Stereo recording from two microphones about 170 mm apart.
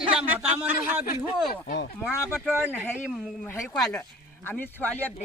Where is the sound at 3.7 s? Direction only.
Centre (ahead or behind).